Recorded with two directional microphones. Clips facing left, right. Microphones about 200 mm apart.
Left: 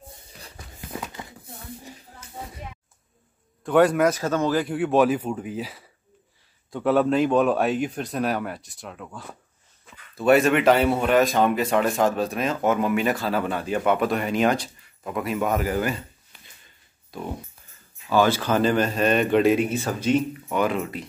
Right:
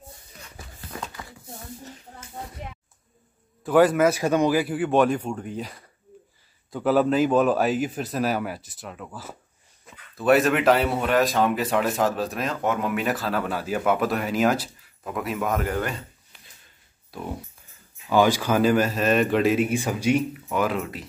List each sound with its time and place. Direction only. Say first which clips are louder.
0.7 s a sound: left 2 dB; 20° left (ahead or behind)
3.6 s speech: even; centre (ahead or behind)
17.1 s speech: left 1 dB; 5° right (ahead or behind)
19.7 s speech: even; 10° right (ahead or behind)